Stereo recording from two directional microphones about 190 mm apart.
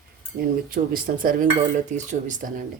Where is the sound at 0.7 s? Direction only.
45° right (ahead or behind).